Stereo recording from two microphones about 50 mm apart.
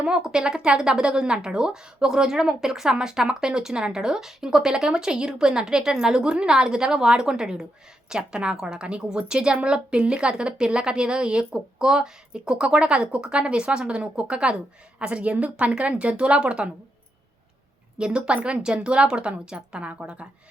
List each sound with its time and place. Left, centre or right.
0.0 s a woman's voice: centre
17.9 s a woman's voice: right